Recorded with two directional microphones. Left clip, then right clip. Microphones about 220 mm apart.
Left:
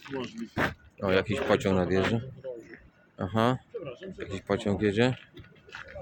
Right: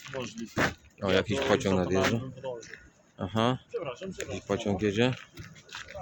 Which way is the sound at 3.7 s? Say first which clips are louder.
Right 4 dB; 25° right (ahead or behind).